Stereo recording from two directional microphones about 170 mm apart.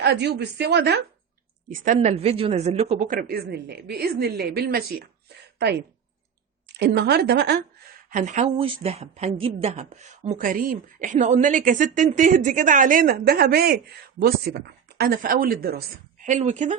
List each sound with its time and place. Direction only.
0.0 s a woman's voice: 75° right (ahead or behind)
1.7 s speech: 45° right (ahead or behind)
2.9 s a woman's voice: 50° right (ahead or behind)
6.7 s a woman's voice: 80° right
8.1 s speech: 45° right (ahead or behind)
8.6 s speech: 35° right (ahead or behind); by 15.8 s 60° right (ahead or behind)
16.2 s speech: 45° right (ahead or behind)